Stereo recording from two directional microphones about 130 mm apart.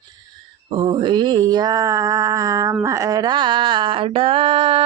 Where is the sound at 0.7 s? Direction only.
40° right (ahead or behind).